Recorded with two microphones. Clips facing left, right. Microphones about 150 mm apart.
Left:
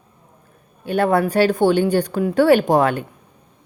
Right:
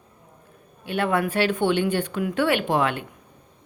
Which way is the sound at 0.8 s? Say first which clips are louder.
Left 6 dB; 40° left (ahead or behind).